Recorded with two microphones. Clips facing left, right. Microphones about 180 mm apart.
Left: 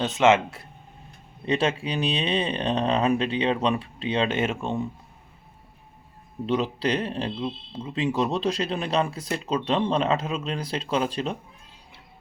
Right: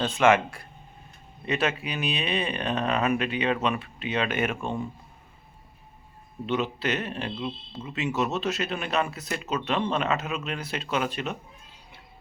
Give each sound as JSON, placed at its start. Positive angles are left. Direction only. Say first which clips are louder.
{"t": 0.0, "sound": "speech", "louder": "left 1 dB", "side_deg": 20}
{"t": 6.4, "sound": "speech", "louder": "left 3 dB", "side_deg": 35}